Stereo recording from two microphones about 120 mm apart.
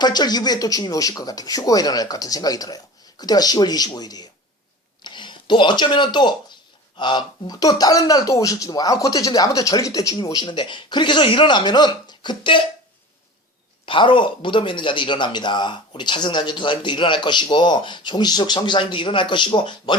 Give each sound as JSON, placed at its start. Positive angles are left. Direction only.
{"t": 0.0, "sound": "speech", "side_deg": 35}
{"t": 13.8, "sound": "speech", "side_deg": 45}